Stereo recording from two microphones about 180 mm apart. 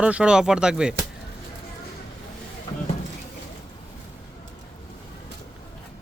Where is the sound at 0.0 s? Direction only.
5° right (ahead or behind).